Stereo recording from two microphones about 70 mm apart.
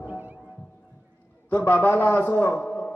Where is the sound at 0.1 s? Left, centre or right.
Right.